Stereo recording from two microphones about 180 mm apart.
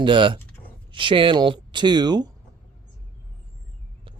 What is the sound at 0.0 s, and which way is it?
Speech, 30° right (ahead or behind).